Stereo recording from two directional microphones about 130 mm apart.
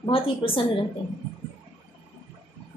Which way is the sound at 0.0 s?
45° left (ahead or behind).